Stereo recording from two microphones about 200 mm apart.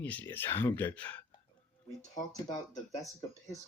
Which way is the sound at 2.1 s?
20° left (ahead or behind).